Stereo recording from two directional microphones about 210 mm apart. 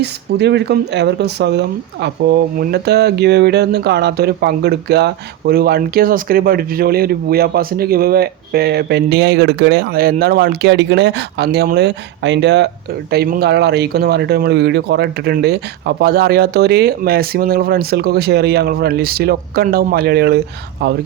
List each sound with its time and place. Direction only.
0.0 s speech: 50° right (ahead or behind)